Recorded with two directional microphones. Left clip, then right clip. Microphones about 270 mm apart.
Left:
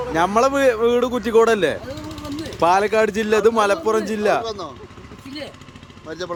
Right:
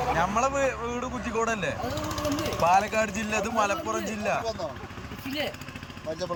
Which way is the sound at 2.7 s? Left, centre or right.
Centre.